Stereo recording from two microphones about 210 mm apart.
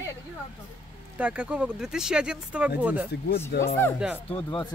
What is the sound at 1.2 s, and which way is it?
Speech, 5° right (ahead or behind).